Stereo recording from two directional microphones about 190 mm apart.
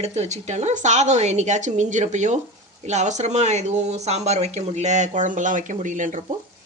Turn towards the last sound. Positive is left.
turn(degrees=-40)  # may be behind; listen again after turning